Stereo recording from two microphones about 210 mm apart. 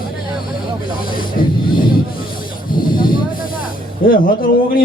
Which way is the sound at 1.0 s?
40° left (ahead or behind).